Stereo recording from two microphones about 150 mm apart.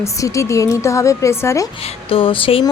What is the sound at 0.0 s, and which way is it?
A woman's voice, 20° left (ahead or behind).